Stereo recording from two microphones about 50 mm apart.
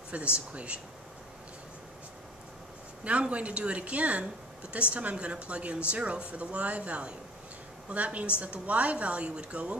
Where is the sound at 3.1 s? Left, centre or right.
Right.